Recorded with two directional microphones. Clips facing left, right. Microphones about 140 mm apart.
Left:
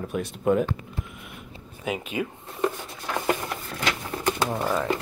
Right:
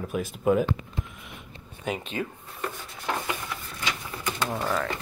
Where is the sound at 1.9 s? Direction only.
10° left (ahead or behind).